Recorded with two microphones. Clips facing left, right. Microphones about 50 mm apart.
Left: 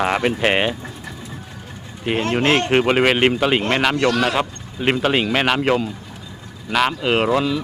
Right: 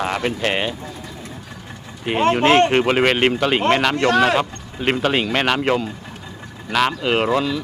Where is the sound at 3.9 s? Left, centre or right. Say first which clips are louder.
Right 1 dB; right.